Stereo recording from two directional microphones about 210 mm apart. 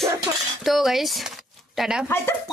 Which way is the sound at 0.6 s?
Centre (ahead or behind).